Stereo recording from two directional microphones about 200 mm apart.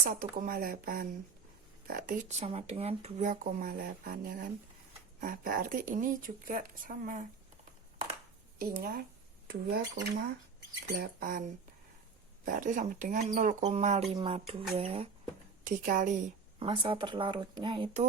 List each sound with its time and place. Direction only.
0.0 s speech: 45° right (ahead or behind)
8.5 s speech: 45° right (ahead or behind)
12.5 s speech: 40° right (ahead or behind)
15.6 s speech: 40° right (ahead or behind)
16.6 s speech: 25° right (ahead or behind)